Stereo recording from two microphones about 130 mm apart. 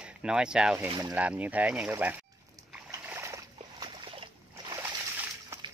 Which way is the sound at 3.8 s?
40° right (ahead or behind).